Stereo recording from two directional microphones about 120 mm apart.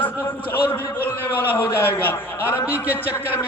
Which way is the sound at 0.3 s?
15° left (ahead or behind).